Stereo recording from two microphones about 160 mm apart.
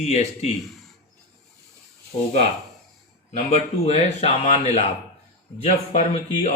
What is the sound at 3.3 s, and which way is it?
Speech, 45° left (ahead or behind).